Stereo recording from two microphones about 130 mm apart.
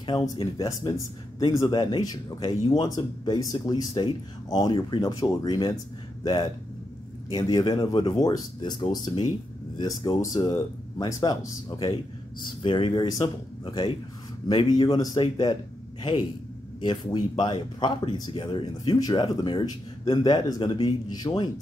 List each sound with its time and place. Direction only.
0.4 s speech: 25° left (ahead or behind)